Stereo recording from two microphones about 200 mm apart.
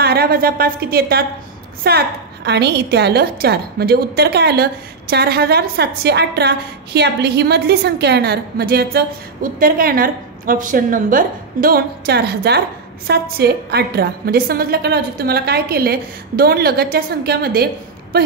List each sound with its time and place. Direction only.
0.0 s a woman's voice: 50° right (ahead or behind)